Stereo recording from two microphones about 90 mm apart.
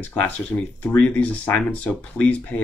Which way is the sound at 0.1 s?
15° left (ahead or behind).